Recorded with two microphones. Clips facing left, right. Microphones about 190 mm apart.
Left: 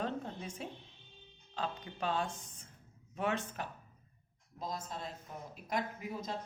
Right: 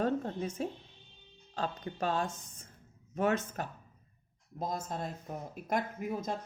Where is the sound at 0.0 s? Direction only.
45° right (ahead or behind).